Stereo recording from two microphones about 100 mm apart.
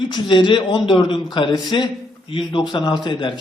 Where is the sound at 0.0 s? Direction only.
55° left (ahead or behind).